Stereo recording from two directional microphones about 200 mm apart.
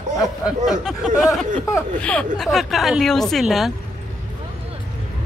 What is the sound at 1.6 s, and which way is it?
Speech, 10° left (ahead or behind).